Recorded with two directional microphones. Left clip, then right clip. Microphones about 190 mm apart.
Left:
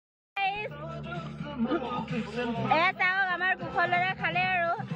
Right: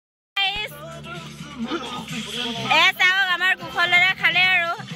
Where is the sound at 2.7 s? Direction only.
10° right (ahead or behind).